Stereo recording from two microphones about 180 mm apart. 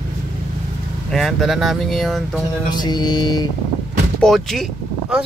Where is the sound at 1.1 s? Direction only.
Centre (ahead or behind).